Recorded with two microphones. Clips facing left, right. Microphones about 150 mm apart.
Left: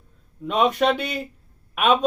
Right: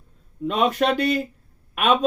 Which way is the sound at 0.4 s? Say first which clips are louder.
Left 1 dB; centre (ahead or behind).